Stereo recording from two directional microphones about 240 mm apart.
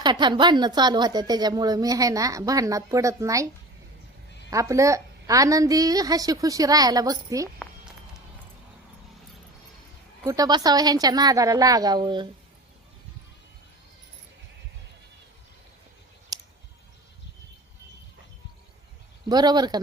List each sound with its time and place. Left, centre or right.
0.0 s a woman's voice: centre
4.5 s a woman's voice: centre
10.2 s a woman's voice: centre
16.3 s clicking: centre
19.3 s a woman's voice: centre